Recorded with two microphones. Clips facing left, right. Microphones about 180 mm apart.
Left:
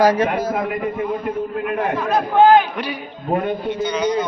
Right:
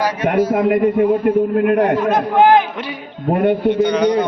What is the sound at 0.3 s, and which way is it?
A man's voice, 60° right (ahead or behind).